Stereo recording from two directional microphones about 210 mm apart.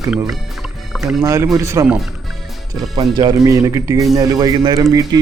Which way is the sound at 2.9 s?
20° right (ahead or behind).